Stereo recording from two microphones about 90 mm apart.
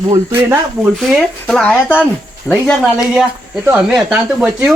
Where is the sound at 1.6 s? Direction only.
20° left (ahead or behind).